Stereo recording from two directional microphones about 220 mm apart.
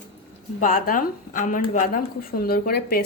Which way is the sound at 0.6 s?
40° left (ahead or behind).